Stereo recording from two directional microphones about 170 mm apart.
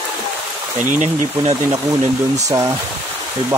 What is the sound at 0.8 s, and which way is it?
Speech, 50° right (ahead or behind).